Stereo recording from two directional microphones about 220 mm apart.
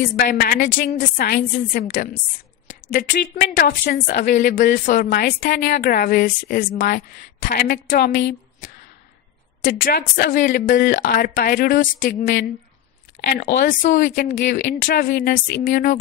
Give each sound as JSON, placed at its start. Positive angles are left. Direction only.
{"t": 0.0, "sound": "a woman's voice", "side_deg": 40}
{"t": 8.2, "sound": "a sound", "side_deg": 40}
{"t": 9.7, "sound": "a woman's voice", "side_deg": 40}